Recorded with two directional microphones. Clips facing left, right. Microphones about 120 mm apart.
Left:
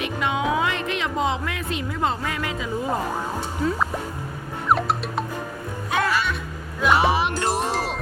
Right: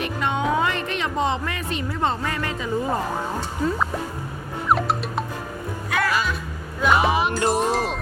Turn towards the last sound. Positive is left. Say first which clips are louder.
# right 3 dB
turn(degrees=0)  # may be behind; listen again after turning